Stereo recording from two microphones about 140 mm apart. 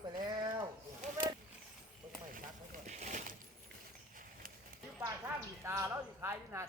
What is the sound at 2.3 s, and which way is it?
Speech, 70° right (ahead or behind).